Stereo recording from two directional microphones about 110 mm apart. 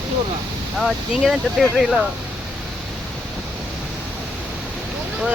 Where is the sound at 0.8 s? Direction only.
Centre (ahead or behind).